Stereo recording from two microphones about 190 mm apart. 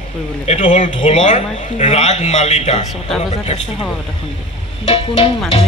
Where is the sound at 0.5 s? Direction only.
35° left (ahead or behind).